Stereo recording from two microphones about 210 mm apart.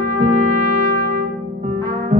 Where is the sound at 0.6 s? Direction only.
40° right (ahead or behind).